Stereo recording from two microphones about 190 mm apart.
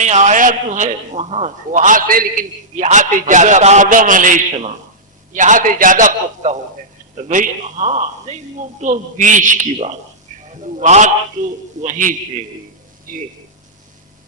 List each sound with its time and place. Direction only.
0.0 s a man's voice: 40° right (ahead or behind)